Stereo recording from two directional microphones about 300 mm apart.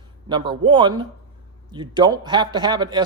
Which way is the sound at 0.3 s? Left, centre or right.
Centre.